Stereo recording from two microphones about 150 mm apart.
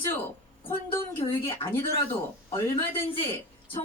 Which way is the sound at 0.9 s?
15° left (ahead or behind).